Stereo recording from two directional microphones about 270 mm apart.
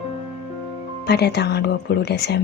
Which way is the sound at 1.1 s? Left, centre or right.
Left.